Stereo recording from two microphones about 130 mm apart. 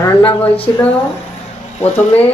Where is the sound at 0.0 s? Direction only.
10° left (ahead or behind).